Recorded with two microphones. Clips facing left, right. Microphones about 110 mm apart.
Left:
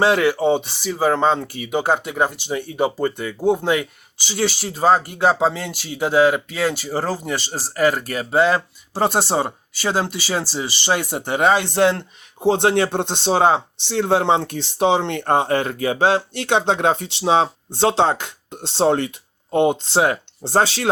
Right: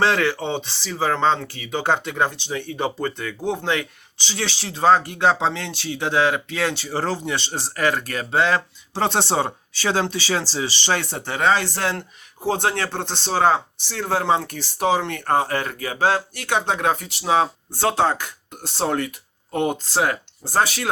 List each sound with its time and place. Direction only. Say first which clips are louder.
0.0 s speech: left 4 dB; 10° left (ahead or behind); by 20.9 s 30° left (ahead or behind)